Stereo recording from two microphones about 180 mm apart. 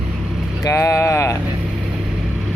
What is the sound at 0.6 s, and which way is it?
Speech, 15° left (ahead or behind).